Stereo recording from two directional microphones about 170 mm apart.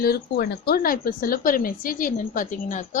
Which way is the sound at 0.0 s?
65° left (ahead or behind).